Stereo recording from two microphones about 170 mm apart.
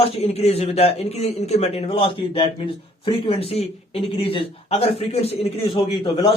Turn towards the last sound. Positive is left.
turn(degrees=25)  # may be behind; listen again after turning